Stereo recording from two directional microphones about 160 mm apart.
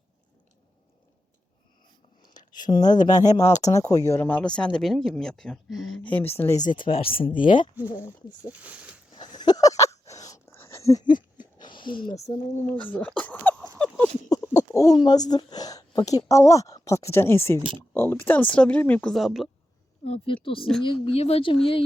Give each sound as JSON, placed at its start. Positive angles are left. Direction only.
{"t": 2.2, "sound": "speech", "side_deg": 25}
{"t": 6.9, "sound": "speech", "side_deg": 40}
{"t": 7.8, "sound": "speech", "side_deg": -10}
{"t": 9.1, "sound": "a sound", "side_deg": 30}
{"t": 11.5, "sound": "speech", "side_deg": 30}
{"t": 14.3, "sound": "a sound", "side_deg": 20}
{"t": 14.9, "sound": "speech", "side_deg": 25}
{"t": 19.1, "sound": "speech", "side_deg": 0}
{"t": 20.1, "sound": "speech", "side_deg": 35}